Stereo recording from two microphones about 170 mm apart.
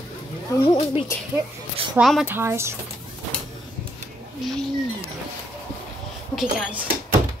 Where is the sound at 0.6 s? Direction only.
35° left (ahead or behind).